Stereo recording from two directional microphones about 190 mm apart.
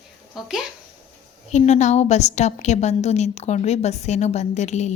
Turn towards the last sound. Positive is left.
turn(degrees=35)  # may be behind; listen again after turning